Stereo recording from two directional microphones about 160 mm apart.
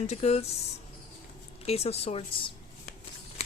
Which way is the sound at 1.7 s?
40° left (ahead or behind).